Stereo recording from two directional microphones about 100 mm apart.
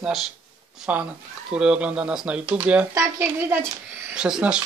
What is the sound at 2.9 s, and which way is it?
Speech, 20° right (ahead or behind).